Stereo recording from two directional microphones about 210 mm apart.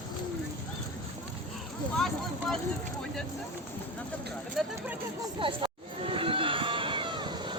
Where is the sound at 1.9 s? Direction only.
Centre (ahead or behind).